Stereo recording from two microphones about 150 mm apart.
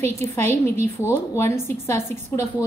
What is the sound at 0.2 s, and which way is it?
A woman's voice, 15° left (ahead or behind).